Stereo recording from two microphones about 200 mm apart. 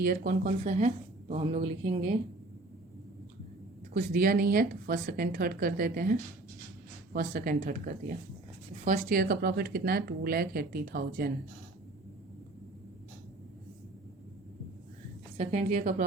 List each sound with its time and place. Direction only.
0.0 s speech: 45° right (ahead or behind); by 2.1 s 30° right (ahead or behind)
3.9 s speech: 45° right (ahead or behind)
15.4 s a woman's voice: 35° right (ahead or behind)